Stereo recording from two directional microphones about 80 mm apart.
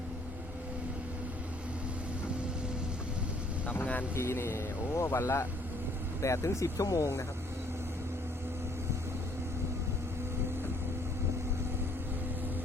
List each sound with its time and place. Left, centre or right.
3.7 s speech: centre
4.1 s speech: left